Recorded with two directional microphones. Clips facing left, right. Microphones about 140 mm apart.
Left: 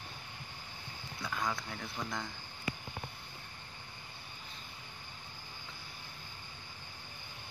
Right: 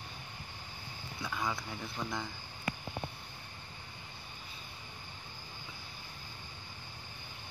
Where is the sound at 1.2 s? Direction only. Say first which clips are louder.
Even; centre (ahead or behind).